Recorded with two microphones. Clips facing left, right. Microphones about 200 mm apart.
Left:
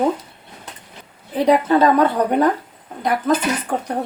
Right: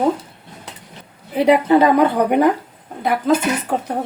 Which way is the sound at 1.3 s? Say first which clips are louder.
Right 2 dB; 10° right (ahead or behind).